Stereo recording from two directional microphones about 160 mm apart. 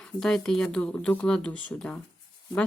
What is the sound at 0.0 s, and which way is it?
Speech, 5° left (ahead or behind).